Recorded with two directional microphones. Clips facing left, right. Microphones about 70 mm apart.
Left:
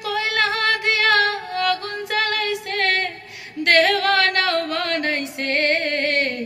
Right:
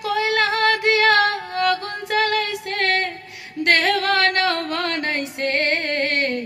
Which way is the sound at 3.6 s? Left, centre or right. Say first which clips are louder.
Left 2 dB; right.